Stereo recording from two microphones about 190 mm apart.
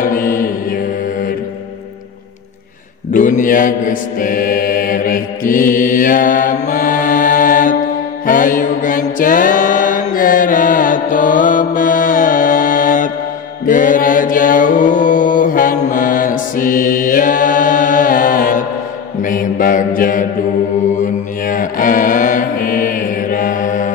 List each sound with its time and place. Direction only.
0.0 s mantra: 45° left (ahead or behind)
3.1 s mantra: 45° left (ahead or behind)